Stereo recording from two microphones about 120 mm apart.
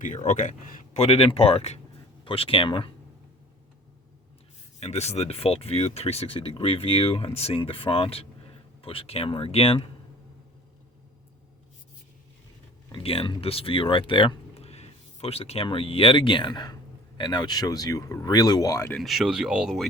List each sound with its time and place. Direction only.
0.0 s speech: 90° left
0.9 s speech: 60° left (ahead or behind)
4.8 s speech: 65° left (ahead or behind)
12.9 s speech: 50° left (ahead or behind); by 18.9 s 30° left (ahead or behind)
19.0 s speech: 5° right (ahead or behind)